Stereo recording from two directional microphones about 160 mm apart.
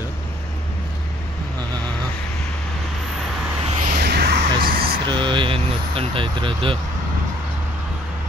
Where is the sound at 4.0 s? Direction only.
80° right; by 4.9 s 65° right (ahead or behind).